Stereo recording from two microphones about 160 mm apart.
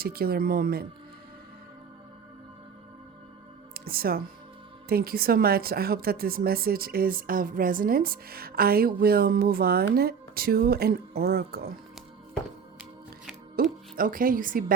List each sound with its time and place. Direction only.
0.0 s speech: 70° right (ahead or behind)
3.8 s speech: 70° right (ahead or behind)
13.6 s speech: 60° right (ahead or behind)